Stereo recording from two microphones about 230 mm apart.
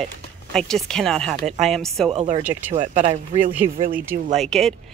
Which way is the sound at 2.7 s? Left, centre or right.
Right.